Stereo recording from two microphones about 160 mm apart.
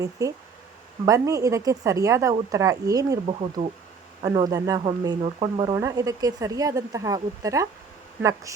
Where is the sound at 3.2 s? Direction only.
35° right (ahead or behind).